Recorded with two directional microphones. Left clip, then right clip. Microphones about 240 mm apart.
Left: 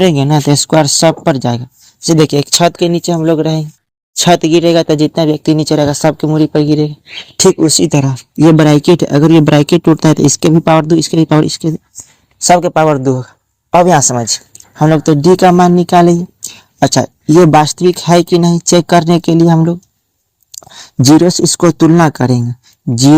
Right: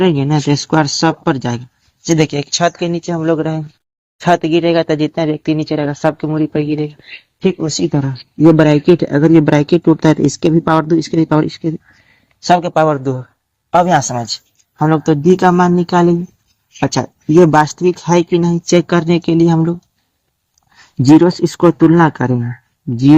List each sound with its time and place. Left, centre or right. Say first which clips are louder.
0.1 s speech: left 4 dB; left
20.7 s speech: left 1 dB; left